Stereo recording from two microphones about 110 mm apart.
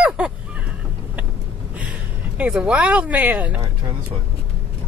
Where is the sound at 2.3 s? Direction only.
10° right (ahead or behind).